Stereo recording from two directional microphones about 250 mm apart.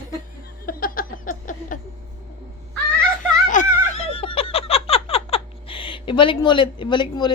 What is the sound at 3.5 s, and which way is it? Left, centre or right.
Giggle, left.